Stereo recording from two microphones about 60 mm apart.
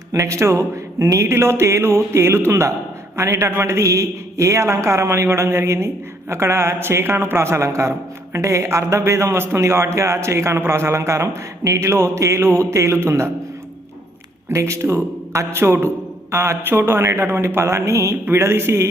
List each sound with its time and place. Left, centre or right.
0.1 s a man's voice: right
14.5 s a man's voice: right
18.3 s a man's voice: right